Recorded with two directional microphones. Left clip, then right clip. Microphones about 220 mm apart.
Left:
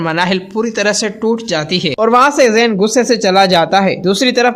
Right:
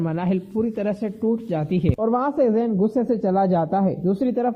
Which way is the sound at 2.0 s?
20° left (ahead or behind).